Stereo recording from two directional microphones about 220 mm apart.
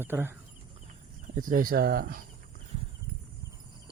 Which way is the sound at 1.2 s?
35° right (ahead or behind).